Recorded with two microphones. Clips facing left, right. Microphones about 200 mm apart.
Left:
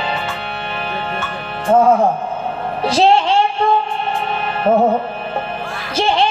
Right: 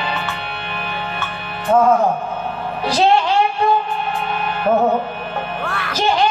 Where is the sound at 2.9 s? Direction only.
30° left (ahead or behind).